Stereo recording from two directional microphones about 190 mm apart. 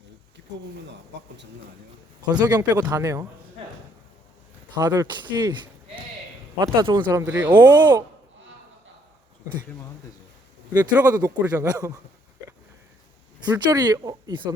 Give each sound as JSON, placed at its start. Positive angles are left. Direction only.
{"t": 1.1, "sound": "speech", "side_deg": -65}
{"t": 2.2, "sound": "speech", "side_deg": -20}
{"t": 4.7, "sound": "speech", "side_deg": -20}
{"t": 6.6, "sound": "speech", "side_deg": -20}
{"t": 10.8, "sound": "speech", "side_deg": -20}
{"t": 13.4, "sound": "speech", "side_deg": -20}